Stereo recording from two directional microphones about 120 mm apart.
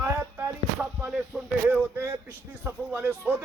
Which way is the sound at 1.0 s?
5° right (ahead or behind).